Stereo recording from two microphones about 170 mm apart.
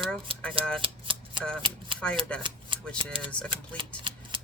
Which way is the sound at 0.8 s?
30° right (ahead or behind).